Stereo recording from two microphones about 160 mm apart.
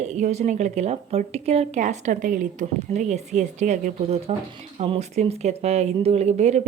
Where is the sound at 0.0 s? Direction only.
45° right (ahead or behind).